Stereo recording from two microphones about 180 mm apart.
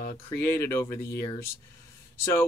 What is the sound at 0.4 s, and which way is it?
Speech, 15° left (ahead or behind).